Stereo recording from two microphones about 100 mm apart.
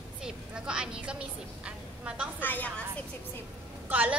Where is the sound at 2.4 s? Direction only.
15° left (ahead or behind).